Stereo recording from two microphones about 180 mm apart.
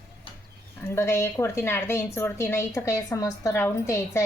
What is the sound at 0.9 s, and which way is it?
A woman's voice, 15° left (ahead or behind).